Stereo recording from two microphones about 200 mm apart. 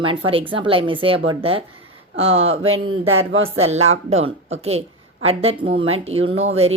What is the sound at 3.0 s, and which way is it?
Speech, 90° right.